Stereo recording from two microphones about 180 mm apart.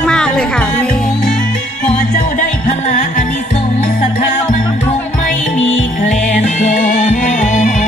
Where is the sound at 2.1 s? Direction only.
45° left (ahead or behind).